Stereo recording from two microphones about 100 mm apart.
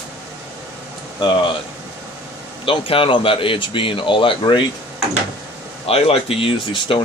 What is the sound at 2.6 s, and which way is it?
Speech, 65° left (ahead or behind).